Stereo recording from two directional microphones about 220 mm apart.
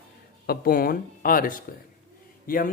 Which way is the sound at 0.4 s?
45° left (ahead or behind).